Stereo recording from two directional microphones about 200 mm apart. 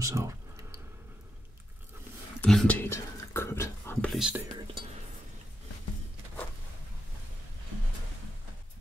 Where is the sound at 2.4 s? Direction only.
5° left (ahead or behind).